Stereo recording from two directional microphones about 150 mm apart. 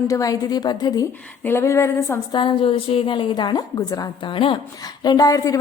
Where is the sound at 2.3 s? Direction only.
35° left (ahead or behind).